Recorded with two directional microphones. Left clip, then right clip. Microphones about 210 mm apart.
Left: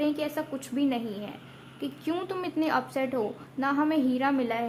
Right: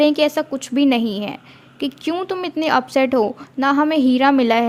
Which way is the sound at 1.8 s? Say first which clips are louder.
Right 9 dB; 35° right (ahead or behind).